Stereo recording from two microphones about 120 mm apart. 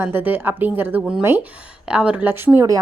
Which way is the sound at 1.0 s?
5° right (ahead or behind).